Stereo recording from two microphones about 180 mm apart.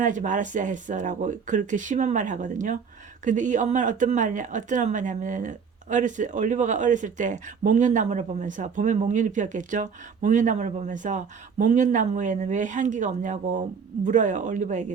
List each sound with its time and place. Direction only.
0.0 s speech: 45° right (ahead or behind)